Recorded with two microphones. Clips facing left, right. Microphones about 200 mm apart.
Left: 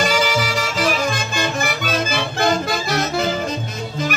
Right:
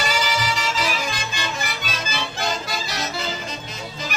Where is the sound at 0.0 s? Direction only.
50° left (ahead or behind).